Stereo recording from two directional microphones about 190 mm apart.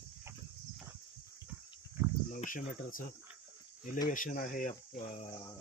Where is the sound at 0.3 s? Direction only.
15° right (ahead or behind).